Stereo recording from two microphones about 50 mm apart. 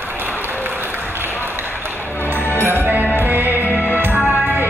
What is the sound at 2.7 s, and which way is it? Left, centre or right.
Music, right.